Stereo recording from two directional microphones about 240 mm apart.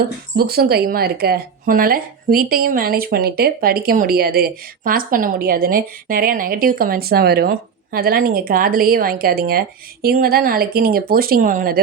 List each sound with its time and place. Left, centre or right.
0.0 s speech: right